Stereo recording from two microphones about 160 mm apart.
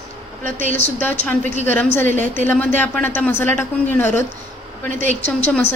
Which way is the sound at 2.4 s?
10° left (ahead or behind).